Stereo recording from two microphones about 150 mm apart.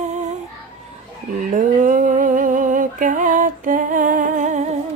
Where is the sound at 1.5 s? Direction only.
60° right (ahead or behind).